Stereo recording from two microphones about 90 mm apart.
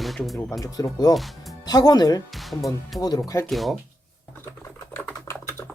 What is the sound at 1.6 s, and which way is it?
Speech, 50° left (ahead or behind).